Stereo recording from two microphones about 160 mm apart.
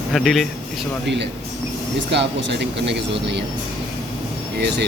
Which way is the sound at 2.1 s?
90° right.